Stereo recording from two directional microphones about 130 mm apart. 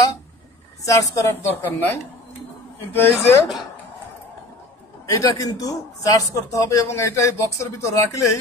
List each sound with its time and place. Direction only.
0.8 s a man's voice: 25° left (ahead or behind)
5.0 s a man's voice: 25° left (ahead or behind)